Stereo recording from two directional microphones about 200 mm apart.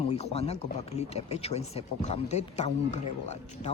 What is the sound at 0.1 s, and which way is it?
Speech, 30° left (ahead or behind).